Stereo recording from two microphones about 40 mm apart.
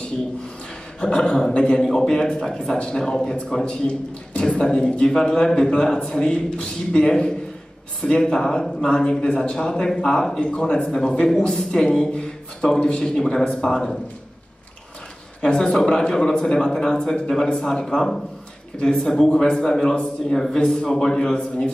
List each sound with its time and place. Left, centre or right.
1.0 s a man's voice: left
13.7 s a man's voice: centre
15.4 s a man's voice: centre
18.7 s a man's voice: centre
19.1 s a man's voice: centre